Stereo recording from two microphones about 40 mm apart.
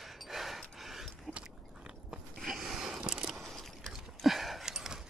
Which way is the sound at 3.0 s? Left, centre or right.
Right.